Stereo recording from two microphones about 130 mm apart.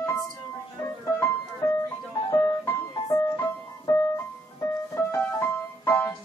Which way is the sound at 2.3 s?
20° left (ahead or behind).